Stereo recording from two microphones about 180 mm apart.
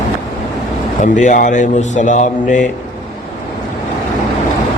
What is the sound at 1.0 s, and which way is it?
Speech, 45° left (ahead or behind).